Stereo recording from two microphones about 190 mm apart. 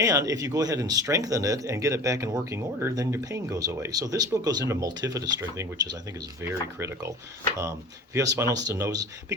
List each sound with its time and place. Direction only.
0.0 s speech: 15° right (ahead or behind)
8.1 s speech: 15° right (ahead or behind)